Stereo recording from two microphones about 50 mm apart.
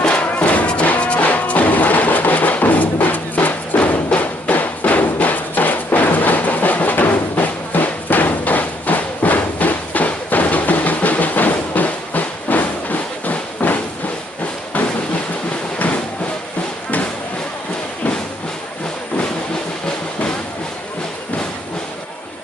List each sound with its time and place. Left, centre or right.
0.0 s music: left